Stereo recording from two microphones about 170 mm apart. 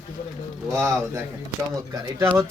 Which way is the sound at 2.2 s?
15° right (ahead or behind).